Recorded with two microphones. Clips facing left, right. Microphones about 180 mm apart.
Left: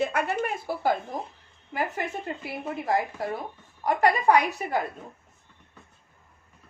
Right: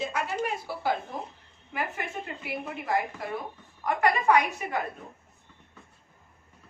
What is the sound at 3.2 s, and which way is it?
A woman's voice, 35° left (ahead or behind).